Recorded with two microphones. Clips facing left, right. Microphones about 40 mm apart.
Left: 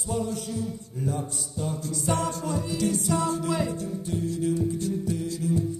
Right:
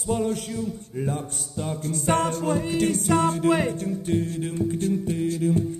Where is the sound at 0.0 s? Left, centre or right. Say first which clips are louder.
Right 4 dB; right.